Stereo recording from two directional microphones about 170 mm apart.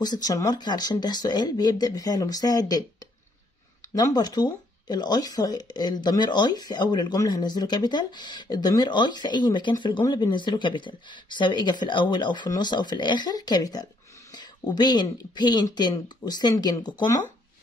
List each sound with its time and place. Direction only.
0.0 s speech: 20° left (ahead or behind)
3.9 s speech: 20° left (ahead or behind)